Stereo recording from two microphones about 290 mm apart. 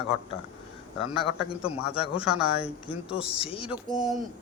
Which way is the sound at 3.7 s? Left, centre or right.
Centre.